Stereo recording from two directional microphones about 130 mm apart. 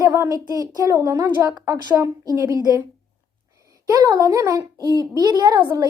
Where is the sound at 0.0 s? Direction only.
30° right (ahead or behind).